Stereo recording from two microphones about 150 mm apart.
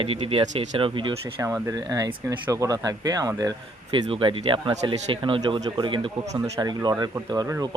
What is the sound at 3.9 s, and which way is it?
Speech, 35° right (ahead or behind).